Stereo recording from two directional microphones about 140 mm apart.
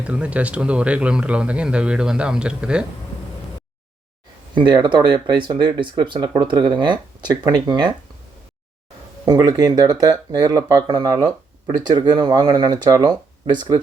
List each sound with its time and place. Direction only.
0.0 s speech: 10° right (ahead or behind)
4.5 s speech: 35° right (ahead or behind)
9.2 s speech: 30° right (ahead or behind)